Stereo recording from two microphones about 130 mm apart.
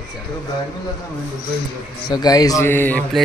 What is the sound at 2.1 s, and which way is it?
Speech, 30° left (ahead or behind).